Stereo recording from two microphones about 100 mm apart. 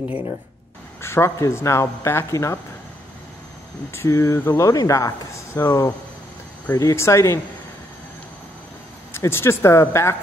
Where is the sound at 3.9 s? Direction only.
30° left (ahead or behind).